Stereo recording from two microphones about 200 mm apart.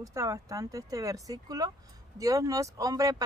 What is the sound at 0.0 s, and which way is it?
Speech, 15° right (ahead or behind).